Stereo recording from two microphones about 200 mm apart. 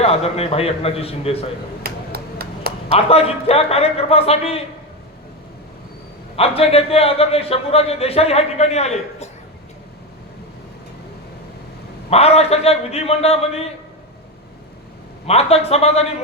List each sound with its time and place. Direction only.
0.0 s a man's voice: 30° left (ahead or behind)
1.8 s a sound: 50° right (ahead or behind)
2.9 s a man's voice: 30° left (ahead or behind)
6.6 s speech: 30° left (ahead or behind)
12.1 s speech: 30° left (ahead or behind)
15.3 s speech: 30° left (ahead or behind)